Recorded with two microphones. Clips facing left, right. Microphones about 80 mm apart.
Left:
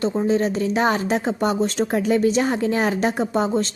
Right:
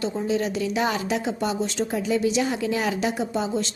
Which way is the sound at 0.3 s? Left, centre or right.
Left.